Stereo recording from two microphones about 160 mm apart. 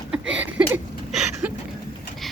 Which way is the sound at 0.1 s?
5° right (ahead or behind).